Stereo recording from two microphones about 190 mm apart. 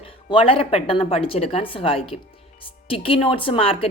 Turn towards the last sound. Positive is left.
turn(degrees=30)  # may be behind; listen again after turning